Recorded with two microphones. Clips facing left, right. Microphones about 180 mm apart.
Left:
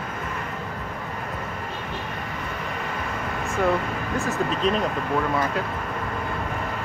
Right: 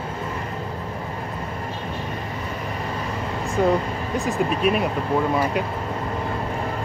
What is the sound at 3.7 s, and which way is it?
Speech, 15° right (ahead or behind).